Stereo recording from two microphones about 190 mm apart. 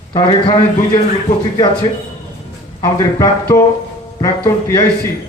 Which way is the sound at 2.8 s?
15° left (ahead or behind).